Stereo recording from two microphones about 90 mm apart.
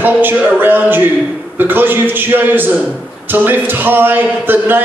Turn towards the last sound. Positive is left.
turn(degrees=-20)  # may be behind; listen again after turning